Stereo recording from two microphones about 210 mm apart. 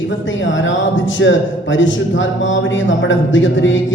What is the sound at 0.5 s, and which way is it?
A man's voice, 65° left (ahead or behind).